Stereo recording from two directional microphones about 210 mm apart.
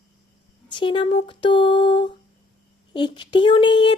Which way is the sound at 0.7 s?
25° left (ahead or behind).